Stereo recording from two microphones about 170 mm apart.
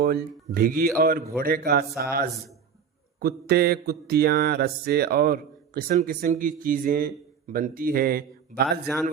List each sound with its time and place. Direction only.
0.0 s mantra: 65° right (ahead or behind)
3.2 s mantra: 65° right (ahead or behind)
6.0 s speech: 50° right (ahead or behind)
6.4 s mantra: 55° right (ahead or behind)